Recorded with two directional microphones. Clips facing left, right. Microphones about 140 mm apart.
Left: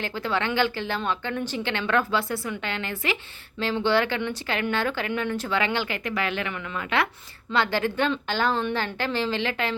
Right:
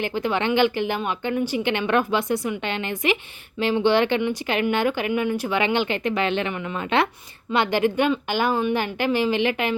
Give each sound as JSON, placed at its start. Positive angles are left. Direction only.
{"t": 0.0, "sound": "speech", "side_deg": -15}